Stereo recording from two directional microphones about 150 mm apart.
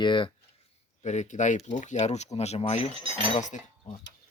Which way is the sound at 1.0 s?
50° left (ahead or behind).